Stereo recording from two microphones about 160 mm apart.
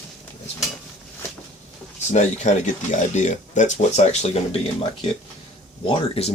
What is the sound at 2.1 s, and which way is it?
Speech, 50° left (ahead or behind).